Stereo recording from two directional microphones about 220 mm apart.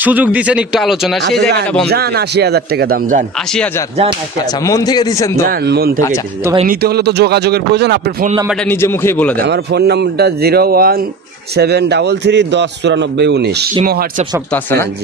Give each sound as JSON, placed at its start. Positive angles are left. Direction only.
{"t": 0.0, "sound": "speech", "side_deg": -5}
{"t": 1.9, "sound": "a man's voice", "side_deg": -50}
{"t": 3.5, "sound": "a man's voice", "side_deg": 5}
{"t": 5.5, "sound": "a man's voice", "side_deg": -45}
{"t": 8.6, "sound": "a man's voice", "side_deg": 10}
{"t": 9.4, "sound": "a man's voice", "side_deg": -50}
{"t": 14.5, "sound": "a man's voice", "side_deg": 10}